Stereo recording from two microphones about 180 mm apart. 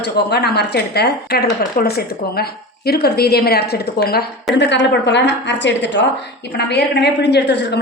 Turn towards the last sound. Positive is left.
turn(degrees=70)  # may be behind; listen again after turning